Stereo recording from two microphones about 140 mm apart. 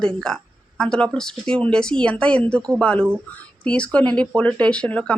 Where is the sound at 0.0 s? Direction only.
5° left (ahead or behind).